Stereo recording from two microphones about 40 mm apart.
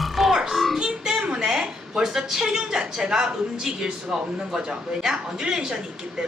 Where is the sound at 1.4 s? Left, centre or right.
Centre.